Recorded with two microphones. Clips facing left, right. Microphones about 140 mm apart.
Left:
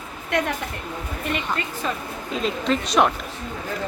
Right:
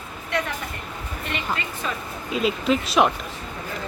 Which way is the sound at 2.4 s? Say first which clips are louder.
Right 1 dB; 5° right (ahead or behind).